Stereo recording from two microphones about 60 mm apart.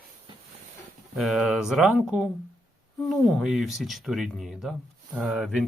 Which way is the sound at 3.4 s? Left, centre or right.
Centre.